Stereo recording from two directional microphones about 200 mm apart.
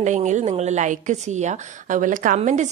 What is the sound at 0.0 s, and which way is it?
A woman's voice, 35° right (ahead or behind).